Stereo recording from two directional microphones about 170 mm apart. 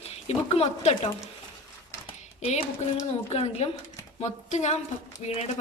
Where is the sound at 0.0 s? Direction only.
35° left (ahead or behind).